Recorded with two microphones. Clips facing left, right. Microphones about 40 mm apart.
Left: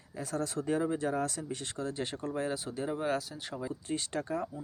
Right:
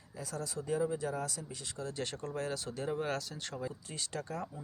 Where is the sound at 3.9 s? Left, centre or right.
Left.